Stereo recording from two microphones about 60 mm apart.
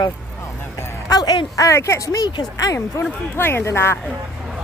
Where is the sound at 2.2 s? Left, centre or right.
Left.